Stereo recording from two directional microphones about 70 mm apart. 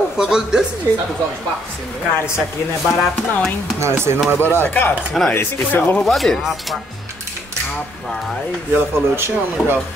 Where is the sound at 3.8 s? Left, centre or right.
Right.